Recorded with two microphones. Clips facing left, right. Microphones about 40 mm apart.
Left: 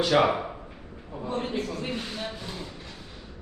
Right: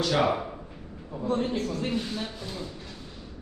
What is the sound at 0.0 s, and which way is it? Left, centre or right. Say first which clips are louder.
A man's voice: left 3 dB; left.